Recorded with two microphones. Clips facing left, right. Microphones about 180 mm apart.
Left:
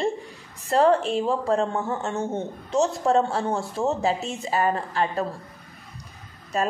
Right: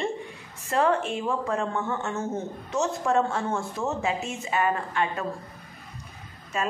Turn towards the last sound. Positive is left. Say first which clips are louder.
# left 4 dB
turn(degrees=35)  # may be behind; listen again after turning